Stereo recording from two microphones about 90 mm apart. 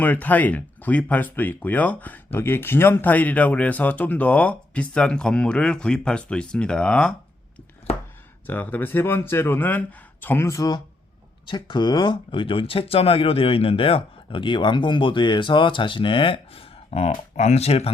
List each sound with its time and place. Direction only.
0.0 s speech: 20° left (ahead or behind)
8.4 s speech: 20° left (ahead or behind)
11.4 s speech: 55° left (ahead or behind); by 16.6 s 80° left
17.7 s speech: 90° left